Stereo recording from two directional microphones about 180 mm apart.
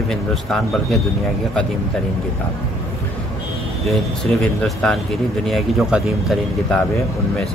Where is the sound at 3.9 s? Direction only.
Centre (ahead or behind).